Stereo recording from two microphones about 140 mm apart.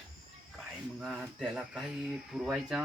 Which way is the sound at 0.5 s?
5° right (ahead or behind).